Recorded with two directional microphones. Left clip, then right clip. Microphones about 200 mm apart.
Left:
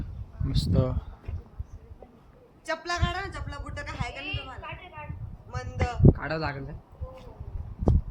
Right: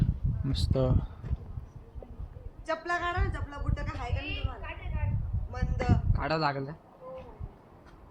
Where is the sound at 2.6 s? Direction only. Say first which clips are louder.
Even; 20° left (ahead or behind).